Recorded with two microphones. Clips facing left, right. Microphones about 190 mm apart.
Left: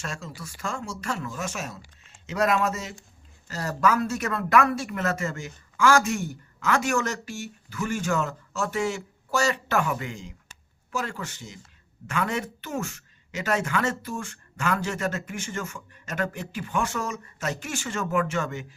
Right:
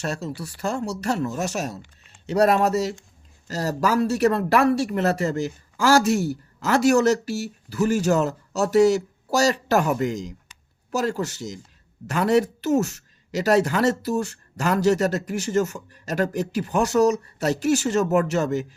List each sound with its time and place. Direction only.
0.0 s speech: 40° right (ahead or behind)